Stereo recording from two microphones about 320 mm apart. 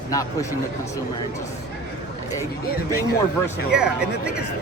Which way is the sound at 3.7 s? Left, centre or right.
Centre.